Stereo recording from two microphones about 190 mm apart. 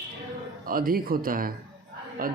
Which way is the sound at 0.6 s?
50° right (ahead or behind).